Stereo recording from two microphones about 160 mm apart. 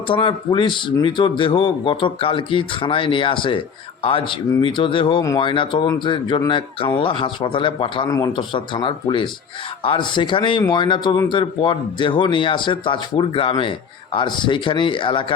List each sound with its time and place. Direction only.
0.1 s speech: 30° left (ahead or behind)